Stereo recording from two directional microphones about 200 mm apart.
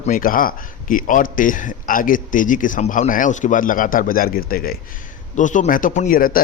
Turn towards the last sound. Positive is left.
turn(degrees=45)  # may be behind; listen again after turning